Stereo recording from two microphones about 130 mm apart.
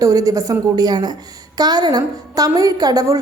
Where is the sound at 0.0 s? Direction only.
25° right (ahead or behind).